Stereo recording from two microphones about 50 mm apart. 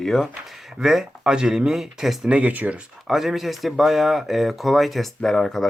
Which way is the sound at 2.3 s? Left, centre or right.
Right.